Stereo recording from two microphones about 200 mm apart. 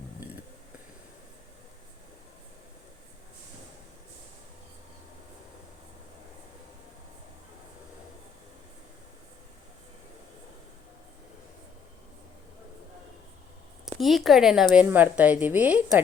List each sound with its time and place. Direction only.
13.8 s a woman's voice: centre (ahead or behind)